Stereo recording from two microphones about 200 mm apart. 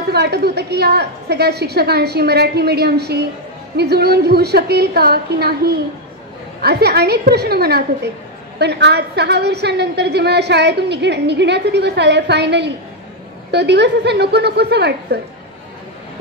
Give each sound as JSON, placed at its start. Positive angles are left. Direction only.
{"t": 0.1, "sound": "a woman's voice", "side_deg": -55}